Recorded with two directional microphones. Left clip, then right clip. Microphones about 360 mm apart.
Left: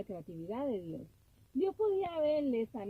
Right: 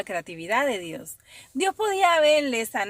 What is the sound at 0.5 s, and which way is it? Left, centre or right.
Speech, centre.